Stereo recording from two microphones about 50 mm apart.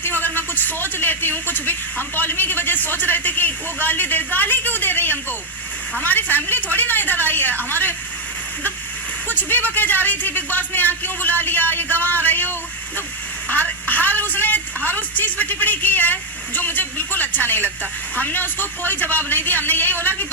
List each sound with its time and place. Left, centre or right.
0.0 s speech: left
9.3 s speech: left